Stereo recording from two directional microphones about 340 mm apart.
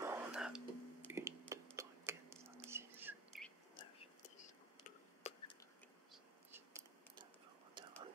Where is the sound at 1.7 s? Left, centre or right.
Centre.